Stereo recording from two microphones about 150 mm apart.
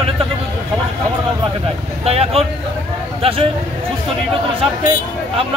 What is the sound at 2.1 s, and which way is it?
Speech, 40° right (ahead or behind).